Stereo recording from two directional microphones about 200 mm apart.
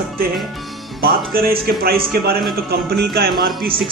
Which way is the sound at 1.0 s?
50° right (ahead or behind).